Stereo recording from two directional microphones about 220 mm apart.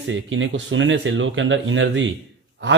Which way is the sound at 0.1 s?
60° right (ahead or behind).